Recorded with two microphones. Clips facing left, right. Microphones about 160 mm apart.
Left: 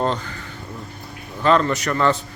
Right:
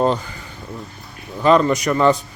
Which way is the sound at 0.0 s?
10° right (ahead or behind).